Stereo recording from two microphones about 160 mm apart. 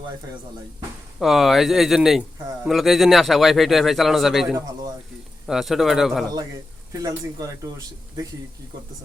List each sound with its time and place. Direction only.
1.2 s a man's voice: centre (ahead or behind)
6.9 s speech: 20° right (ahead or behind)